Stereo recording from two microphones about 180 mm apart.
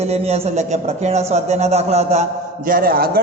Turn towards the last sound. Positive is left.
turn(degrees=-55)  # may be behind; listen again after turning